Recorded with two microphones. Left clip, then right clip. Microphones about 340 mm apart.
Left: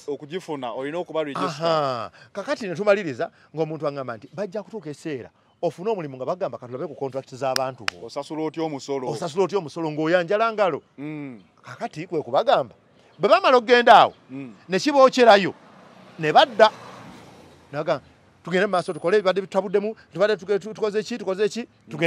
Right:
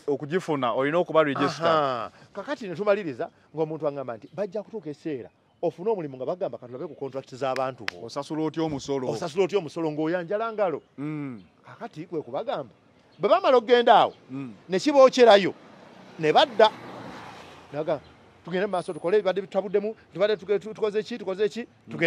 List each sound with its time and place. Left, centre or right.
0.0 s speech: right
1.3 s a man's voice: left
8.1 s speech: right
9.1 s speech: left
9.9 s a man's voice: left
11.0 s speech: right
11.6 s a man's voice: left
17.7 s a man's voice: left